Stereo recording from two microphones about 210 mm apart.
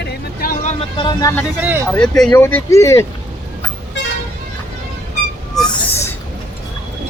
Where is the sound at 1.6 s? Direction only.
10° right (ahead or behind).